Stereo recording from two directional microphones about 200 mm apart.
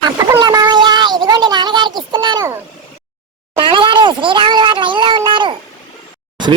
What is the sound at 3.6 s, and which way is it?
A child's voice, 25° right (ahead or behind).